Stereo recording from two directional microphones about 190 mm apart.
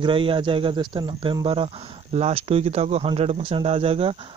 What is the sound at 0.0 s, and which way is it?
Speech, 25° right (ahead or behind).